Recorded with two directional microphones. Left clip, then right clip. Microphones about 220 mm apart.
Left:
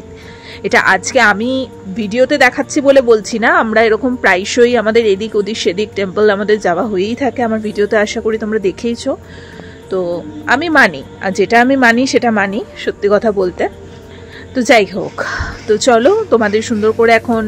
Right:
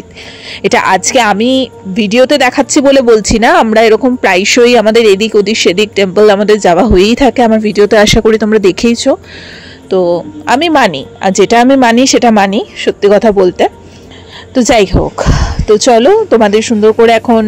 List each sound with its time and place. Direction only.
0.5 s a woman's voice: 35° right (ahead or behind)